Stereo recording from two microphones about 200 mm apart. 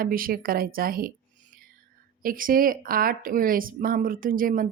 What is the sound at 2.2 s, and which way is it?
Speech, 45° right (ahead or behind).